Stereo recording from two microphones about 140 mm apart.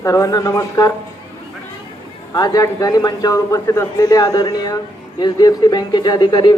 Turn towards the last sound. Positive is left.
turn(degrees=30)  # may be behind; listen again after turning